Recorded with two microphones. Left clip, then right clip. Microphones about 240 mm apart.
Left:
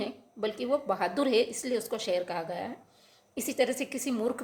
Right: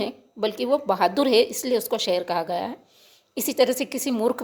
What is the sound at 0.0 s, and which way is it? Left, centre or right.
A woman's voice, right.